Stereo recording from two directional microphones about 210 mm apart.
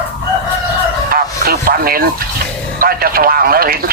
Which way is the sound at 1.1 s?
45° right (ahead or behind).